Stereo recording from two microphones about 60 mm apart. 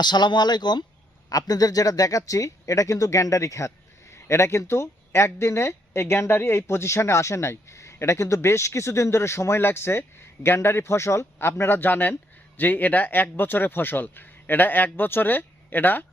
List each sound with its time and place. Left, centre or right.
1.3 s speech: left
4.1 s a man's voice: left